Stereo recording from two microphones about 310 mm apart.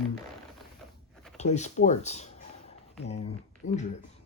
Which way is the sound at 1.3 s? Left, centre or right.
Left.